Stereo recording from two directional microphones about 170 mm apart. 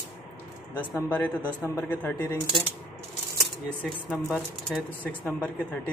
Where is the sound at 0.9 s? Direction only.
10° left (ahead or behind).